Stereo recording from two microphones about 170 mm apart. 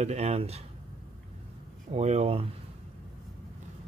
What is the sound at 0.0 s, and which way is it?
Speech, 40° right (ahead or behind).